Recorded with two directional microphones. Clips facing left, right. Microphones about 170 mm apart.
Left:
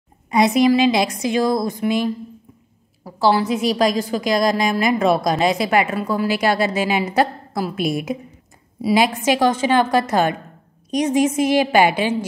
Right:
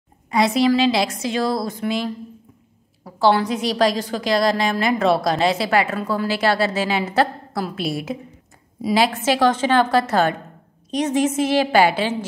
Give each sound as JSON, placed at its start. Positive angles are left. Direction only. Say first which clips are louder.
{"t": 0.3, "sound": "a woman's voice", "louder": "left 2 dB", "side_deg": 20}
{"t": 3.0, "sound": "a woman's voice", "louder": "even", "side_deg": 5}